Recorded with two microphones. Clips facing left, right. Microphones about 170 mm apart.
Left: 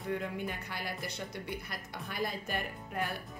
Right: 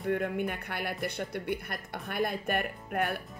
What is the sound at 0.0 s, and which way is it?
Speech, 55° right (ahead or behind).